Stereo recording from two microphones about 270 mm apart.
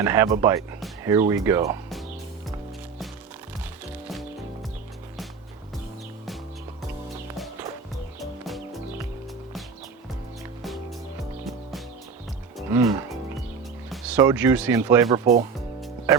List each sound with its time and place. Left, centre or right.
0.0 s speech: centre
8.2 s music: centre
12.5 s music: centre
14.2 s speech: centre
15.2 s speech: right